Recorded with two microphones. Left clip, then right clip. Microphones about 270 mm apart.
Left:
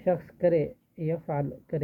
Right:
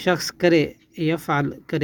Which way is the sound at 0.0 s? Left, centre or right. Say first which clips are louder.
Right 5 dB; right.